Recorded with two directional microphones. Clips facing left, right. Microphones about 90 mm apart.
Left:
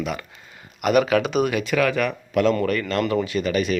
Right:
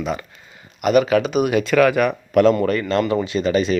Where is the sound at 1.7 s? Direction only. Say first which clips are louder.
Right 6 dB; 45° right (ahead or behind).